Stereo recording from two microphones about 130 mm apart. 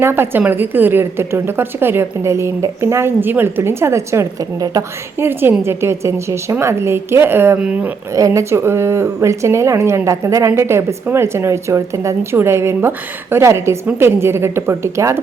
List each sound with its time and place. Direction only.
0.0 s speech: 15° right (ahead or behind)